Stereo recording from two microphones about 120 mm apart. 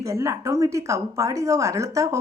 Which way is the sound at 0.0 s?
25° right (ahead or behind).